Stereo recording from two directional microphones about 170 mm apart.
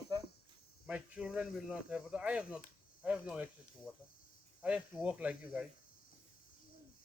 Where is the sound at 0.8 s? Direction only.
10° right (ahead or behind).